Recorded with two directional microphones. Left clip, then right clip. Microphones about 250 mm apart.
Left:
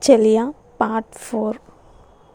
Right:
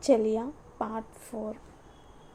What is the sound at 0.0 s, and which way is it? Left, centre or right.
A woman's voice, left.